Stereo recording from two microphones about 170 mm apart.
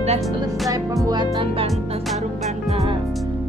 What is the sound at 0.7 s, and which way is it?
A woman's voice, 20° right (ahead or behind).